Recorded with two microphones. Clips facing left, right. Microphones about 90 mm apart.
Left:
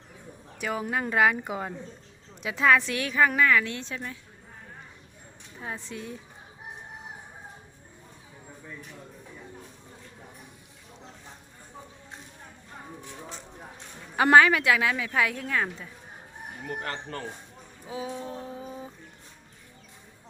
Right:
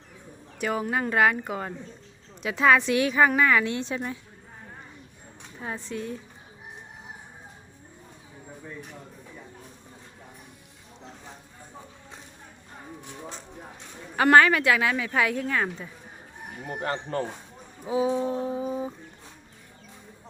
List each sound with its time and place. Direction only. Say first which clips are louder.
0.6 s a woman's voice: right 3 dB; centre (ahead or behind); by 4.2 s 20° right (ahead or behind)
5.5 s a woman's voice: right 3 dB; centre (ahead or behind)
14.2 s a woman's voice: right 1 dB; 10° left (ahead or behind)
16.6 s speech: right 4 dB; 25° right (ahead or behind)
17.8 s a woman's voice: right 10 dB; 15° right (ahead or behind)
18.3 s a sound: right 9 dB; 15° right (ahead or behind)